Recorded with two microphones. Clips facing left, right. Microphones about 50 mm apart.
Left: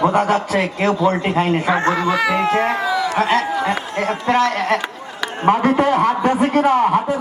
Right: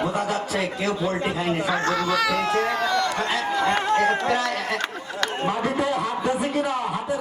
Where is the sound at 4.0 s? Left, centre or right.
Left.